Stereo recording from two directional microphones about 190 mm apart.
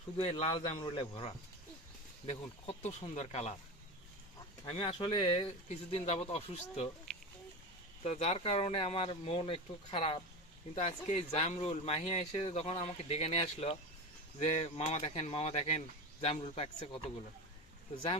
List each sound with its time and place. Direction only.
0.2 s speech: 30° left (ahead or behind)
4.6 s speech: 25° left (ahead or behind)
8.0 s speech: 35° left (ahead or behind)